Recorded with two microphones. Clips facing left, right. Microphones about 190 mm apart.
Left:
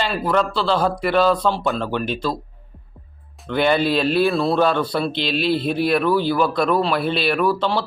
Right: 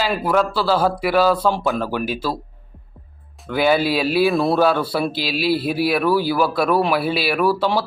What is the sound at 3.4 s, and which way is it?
Speech, 5° right (ahead or behind).